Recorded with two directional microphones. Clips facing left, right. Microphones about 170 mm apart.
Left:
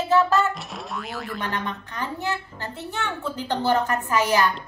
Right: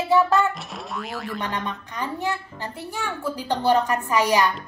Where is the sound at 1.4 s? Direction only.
15° right (ahead or behind).